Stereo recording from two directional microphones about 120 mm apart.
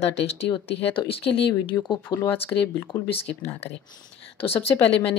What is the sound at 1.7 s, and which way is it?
Speech, 25° left (ahead or behind).